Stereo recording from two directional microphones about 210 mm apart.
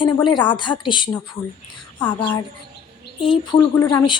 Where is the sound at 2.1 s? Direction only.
20° left (ahead or behind).